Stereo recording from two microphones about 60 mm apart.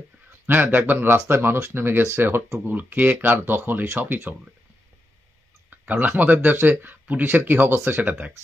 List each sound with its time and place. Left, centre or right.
0.5 s speech: right
5.7 s speech: right
8.0 s speech: right